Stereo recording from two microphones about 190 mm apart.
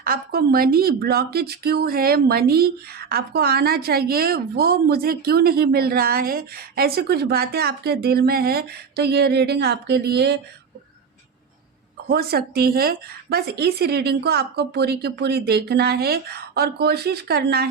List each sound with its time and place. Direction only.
0.0 s a woman's voice: 50° right (ahead or behind)
12.1 s a woman's voice: 55° right (ahead or behind)